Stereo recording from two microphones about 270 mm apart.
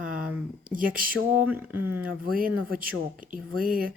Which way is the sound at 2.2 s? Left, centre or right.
Right.